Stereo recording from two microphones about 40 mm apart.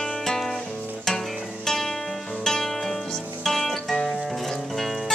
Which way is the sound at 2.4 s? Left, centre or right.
Centre.